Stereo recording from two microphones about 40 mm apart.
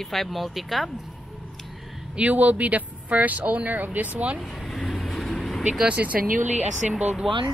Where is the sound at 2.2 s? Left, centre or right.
Right.